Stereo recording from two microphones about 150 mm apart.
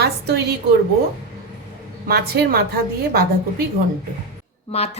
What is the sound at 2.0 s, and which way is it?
A woman's voice, 90° right.